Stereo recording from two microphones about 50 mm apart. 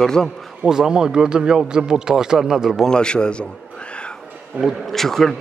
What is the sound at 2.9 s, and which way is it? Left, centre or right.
Speech, centre.